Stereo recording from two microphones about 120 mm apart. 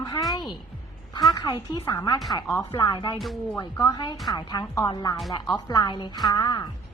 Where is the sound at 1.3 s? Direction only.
35° left (ahead or behind).